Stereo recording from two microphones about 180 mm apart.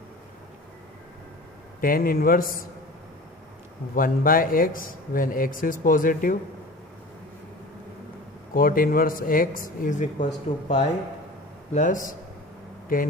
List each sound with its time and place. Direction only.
1.8 s speech: 55° left (ahead or behind)
3.9 s speech: 50° left (ahead or behind)
8.5 s speech: 55° left (ahead or behind)
11.7 s speech: 45° left (ahead or behind)